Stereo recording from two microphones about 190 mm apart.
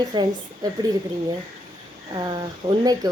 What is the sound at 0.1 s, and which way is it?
Speech, 20° right (ahead or behind).